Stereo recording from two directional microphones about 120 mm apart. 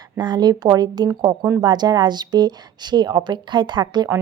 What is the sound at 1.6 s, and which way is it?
A woman's voice, 35° right (ahead or behind).